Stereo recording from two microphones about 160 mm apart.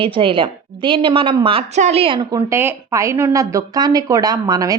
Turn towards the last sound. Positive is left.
turn(degrees=-20)  # may be behind; listen again after turning